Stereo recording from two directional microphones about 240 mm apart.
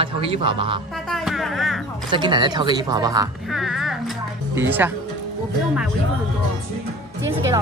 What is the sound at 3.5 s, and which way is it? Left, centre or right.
Music, centre.